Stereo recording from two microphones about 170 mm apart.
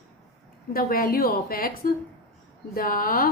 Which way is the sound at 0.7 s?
60° left (ahead or behind).